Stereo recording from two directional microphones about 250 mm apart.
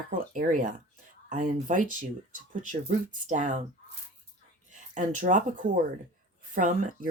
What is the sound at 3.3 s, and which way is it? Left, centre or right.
Speech, right.